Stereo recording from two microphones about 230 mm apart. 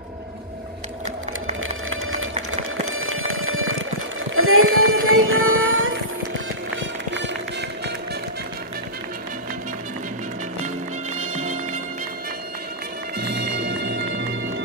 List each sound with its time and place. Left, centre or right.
1.6 s a sound: right
2.9 s alarm clock: right
4.4 s synthetic singing: right
6.8 s run: right
11.4 s music: right
13.2 s music: right